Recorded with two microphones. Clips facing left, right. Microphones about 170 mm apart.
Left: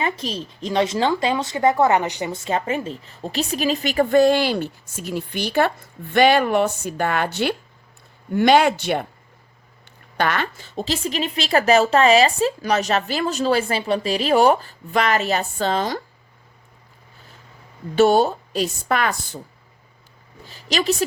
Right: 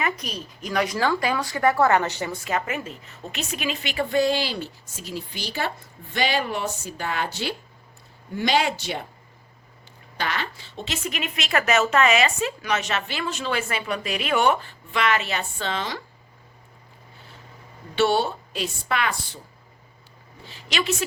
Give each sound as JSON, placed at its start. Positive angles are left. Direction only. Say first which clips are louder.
{"t": 0.0, "sound": "a woman's voice", "louder": "left 3 dB", "side_deg": 30}
{"t": 10.2, "sound": "a woman's voice", "louder": "left 7 dB", "side_deg": 55}
{"t": 10.8, "sound": "speech", "louder": "left 7 dB", "side_deg": 35}
{"t": 17.9, "sound": "a woman's voice", "louder": "left 6 dB", "side_deg": 45}
{"t": 20.5, "sound": "speech", "louder": "left 5 dB", "side_deg": 40}